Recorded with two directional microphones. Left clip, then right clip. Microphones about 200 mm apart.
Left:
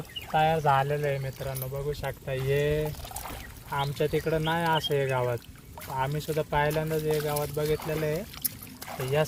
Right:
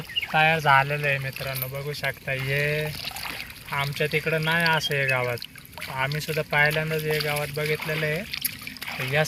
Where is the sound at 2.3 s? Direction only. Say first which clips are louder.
Even; 30° left (ahead or behind).